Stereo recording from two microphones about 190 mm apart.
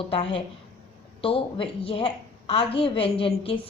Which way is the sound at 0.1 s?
30° left (ahead or behind).